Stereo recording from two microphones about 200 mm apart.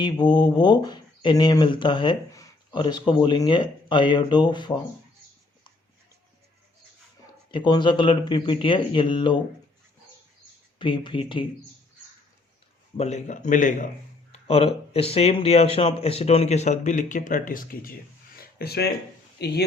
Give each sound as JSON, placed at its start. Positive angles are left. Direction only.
{"t": 0.0, "sound": "speech", "side_deg": 20}
{"t": 7.5, "sound": "speech", "side_deg": 20}
{"t": 10.8, "sound": "speech", "side_deg": 25}
{"t": 13.0, "sound": "speech", "side_deg": 35}
{"t": 14.3, "sound": "a sound", "side_deg": 30}
{"t": 14.9, "sound": "speech", "side_deg": 30}
{"t": 18.3, "sound": "a sound", "side_deg": 50}
{"t": 19.4, "sound": "speech", "side_deg": 55}